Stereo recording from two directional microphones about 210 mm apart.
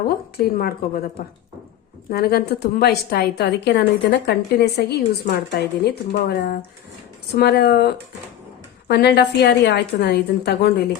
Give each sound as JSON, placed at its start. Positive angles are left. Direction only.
{"t": 0.3, "sound": "a woman's voice", "side_deg": 45}